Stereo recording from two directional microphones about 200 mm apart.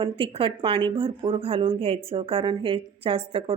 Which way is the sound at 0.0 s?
25° right (ahead or behind).